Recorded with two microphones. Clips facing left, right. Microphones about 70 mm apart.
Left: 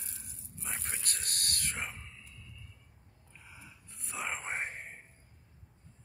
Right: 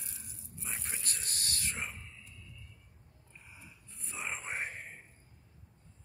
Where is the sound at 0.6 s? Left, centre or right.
Left.